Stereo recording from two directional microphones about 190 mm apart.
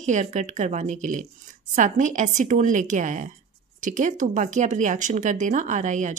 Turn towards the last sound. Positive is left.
turn(degrees=-40)  # may be behind; listen again after turning